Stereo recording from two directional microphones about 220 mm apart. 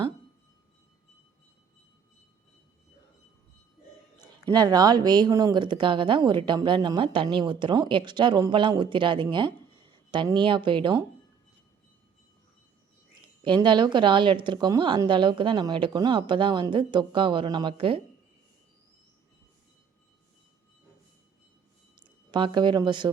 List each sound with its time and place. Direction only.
4.2 s speech: 20° right (ahead or behind)
13.2 s speech: 20° right (ahead or behind)
22.0 s speech: 20° right (ahead or behind)